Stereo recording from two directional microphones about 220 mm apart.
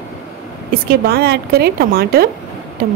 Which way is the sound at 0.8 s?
45° right (ahead or behind).